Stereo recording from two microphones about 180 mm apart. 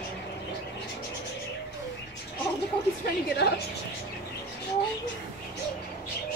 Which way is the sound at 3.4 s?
65° left (ahead or behind).